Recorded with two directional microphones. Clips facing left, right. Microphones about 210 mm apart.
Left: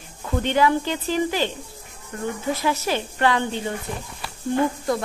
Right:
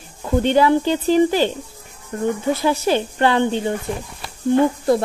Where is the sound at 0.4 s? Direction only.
35° right (ahead or behind).